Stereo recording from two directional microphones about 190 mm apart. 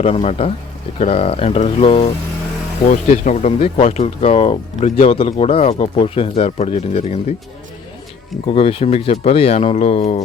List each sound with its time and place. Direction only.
0.0 s speech: 30° left (ahead or behind)
8.5 s speech: 30° left (ahead or behind)